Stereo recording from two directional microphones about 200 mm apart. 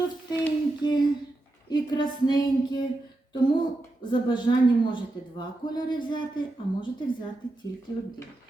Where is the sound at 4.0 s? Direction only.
25° left (ahead or behind).